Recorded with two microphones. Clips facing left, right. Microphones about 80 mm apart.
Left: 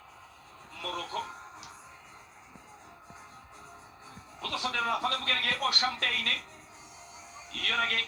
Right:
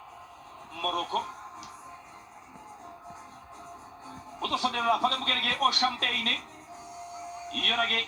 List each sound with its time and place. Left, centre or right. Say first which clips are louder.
0.8 s a man's voice: right 6 dB; right
4.4 s a man's voice: right 4 dB; right
7.4 s speech: right 2 dB; right